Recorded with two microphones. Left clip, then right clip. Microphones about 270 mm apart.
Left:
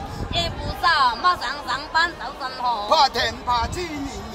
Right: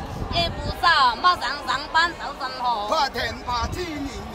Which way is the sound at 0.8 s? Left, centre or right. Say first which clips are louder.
Right 1 dB; centre.